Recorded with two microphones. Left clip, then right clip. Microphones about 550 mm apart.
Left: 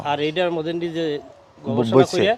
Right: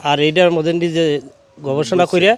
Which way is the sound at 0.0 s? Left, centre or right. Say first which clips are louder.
Right 8 dB; right.